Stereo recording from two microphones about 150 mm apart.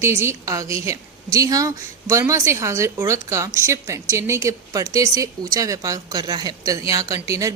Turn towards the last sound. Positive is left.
turn(degrees=-20)  # may be behind; listen again after turning